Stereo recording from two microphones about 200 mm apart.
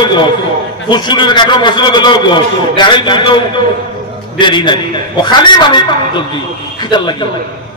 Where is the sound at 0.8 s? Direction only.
20° left (ahead or behind).